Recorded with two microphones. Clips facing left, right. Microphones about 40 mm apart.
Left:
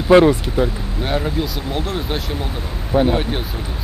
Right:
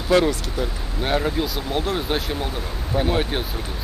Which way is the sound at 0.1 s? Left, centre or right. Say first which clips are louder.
Left 7 dB; left.